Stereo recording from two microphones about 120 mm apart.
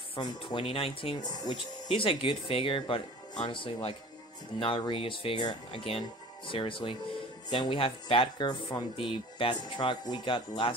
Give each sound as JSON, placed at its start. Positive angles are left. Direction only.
{"t": 0.2, "sound": "speech", "side_deg": 35}
{"t": 0.7, "sound": "speech", "side_deg": 50}
{"t": 1.2, "sound": "speech", "side_deg": 35}
{"t": 1.9, "sound": "speech", "side_deg": 50}